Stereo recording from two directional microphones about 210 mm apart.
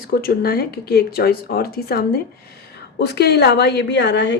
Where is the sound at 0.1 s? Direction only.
45° left (ahead or behind).